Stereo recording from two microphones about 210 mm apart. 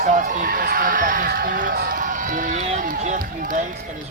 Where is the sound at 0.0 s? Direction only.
40° right (ahead or behind).